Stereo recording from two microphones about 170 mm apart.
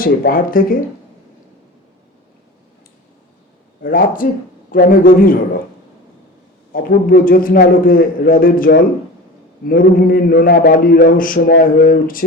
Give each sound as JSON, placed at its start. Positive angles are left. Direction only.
{"t": 0.0, "sound": "a man's voice", "side_deg": 60}
{"t": 3.8, "sound": "a man's voice", "side_deg": 55}
{"t": 6.7, "sound": "a man's voice", "side_deg": 55}